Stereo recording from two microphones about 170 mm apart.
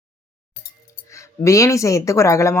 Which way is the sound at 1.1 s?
15° left (ahead or behind).